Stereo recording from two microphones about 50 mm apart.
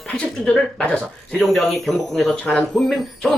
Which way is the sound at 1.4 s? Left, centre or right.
Centre.